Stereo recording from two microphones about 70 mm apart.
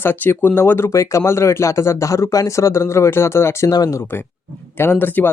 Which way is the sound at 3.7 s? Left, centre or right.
Left.